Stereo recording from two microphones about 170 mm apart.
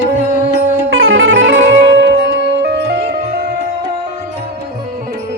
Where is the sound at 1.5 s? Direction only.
90° right.